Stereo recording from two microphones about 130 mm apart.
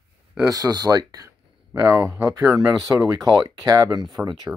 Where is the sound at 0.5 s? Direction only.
30° right (ahead or behind).